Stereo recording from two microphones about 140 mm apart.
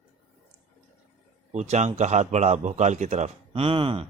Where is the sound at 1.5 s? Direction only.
55° right (ahead or behind).